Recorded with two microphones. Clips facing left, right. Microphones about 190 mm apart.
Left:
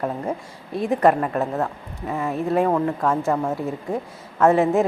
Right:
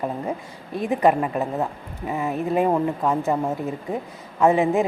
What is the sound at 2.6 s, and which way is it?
Speech, 15° right (ahead or behind).